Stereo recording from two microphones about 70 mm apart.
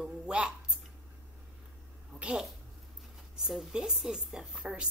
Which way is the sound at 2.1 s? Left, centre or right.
Centre.